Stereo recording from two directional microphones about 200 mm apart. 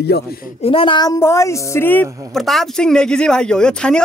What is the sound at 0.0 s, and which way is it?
Speech, 50° left (ahead or behind).